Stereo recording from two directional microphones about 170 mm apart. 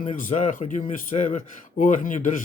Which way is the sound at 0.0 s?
50° left (ahead or behind).